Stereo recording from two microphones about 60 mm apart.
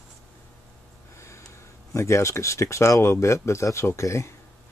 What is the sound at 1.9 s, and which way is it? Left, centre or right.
Speech, left.